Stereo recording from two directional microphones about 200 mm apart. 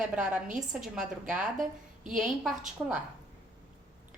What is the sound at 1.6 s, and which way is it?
Speech, 40° right (ahead or behind).